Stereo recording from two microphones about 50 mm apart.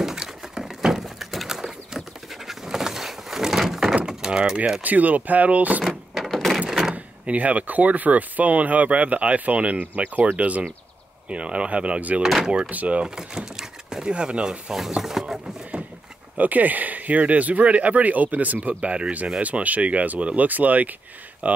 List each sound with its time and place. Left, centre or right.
0.0 s a sound: centre
4.0 s door: centre
4.8 s speech: right
6.1 s a sound: centre
7.2 s speech: right
12.2 s speech: centre
12.6 s speech: right
13.0 s speech: centre
15.0 s a sound: centre
16.3 s speech: right